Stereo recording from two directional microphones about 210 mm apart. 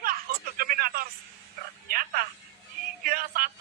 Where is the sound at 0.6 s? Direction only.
45° right (ahead or behind).